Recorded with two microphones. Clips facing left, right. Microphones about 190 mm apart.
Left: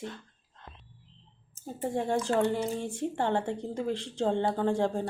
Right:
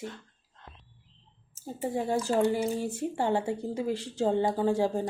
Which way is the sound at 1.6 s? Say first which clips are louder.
Even; 5° right (ahead or behind).